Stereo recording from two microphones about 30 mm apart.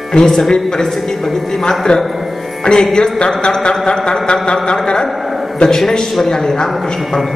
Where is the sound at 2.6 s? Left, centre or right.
Left.